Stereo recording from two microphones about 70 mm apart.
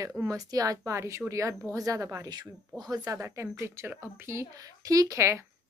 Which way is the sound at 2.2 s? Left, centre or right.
Right.